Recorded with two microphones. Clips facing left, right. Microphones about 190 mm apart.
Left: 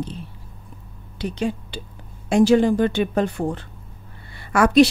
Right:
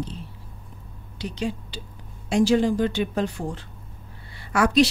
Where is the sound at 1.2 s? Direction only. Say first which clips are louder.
Left 4 dB; 55° left (ahead or behind).